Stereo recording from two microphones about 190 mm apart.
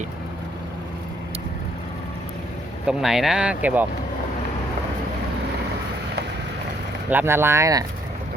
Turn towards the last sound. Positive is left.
turn(degrees=-15)  # may be behind; listen again after turning